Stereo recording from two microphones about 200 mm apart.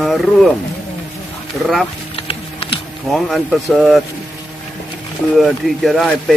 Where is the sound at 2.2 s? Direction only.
30° left (ahead or behind).